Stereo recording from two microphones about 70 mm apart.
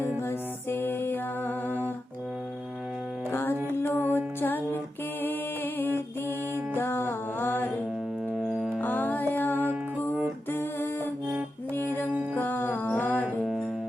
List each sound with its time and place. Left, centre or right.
0.3 s music: left
3.3 s music: left
6.7 s music: left
8.4 s music: centre
8.8 s music: left